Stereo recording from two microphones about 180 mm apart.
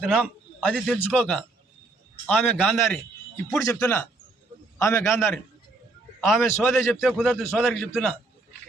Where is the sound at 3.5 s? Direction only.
15° left (ahead or behind).